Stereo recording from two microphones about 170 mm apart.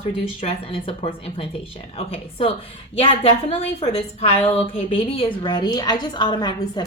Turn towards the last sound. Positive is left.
turn(degrees=25)  # may be behind; listen again after turning